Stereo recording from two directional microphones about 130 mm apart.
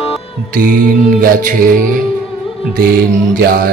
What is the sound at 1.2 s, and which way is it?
Speech, 90° right.